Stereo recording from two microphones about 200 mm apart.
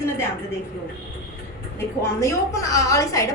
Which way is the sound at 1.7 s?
15° left (ahead or behind).